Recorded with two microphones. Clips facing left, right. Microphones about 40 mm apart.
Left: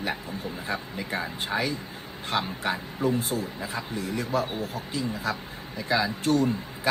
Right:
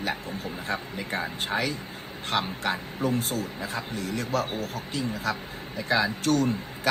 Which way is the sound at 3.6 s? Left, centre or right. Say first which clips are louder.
Even; right.